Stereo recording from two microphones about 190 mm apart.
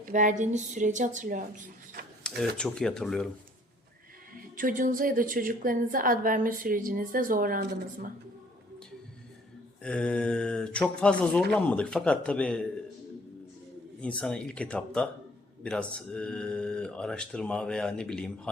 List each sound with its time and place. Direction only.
0.0 s a woman's voice: 40° right (ahead or behind)
2.3 s a sound: 5° left (ahead or behind)
2.6 s speech: 5° left (ahead or behind)
4.5 s a woman's voice: 45° right (ahead or behind)
9.8 s speech: 5° left (ahead or behind)
14.0 s speech: 5° left (ahead or behind)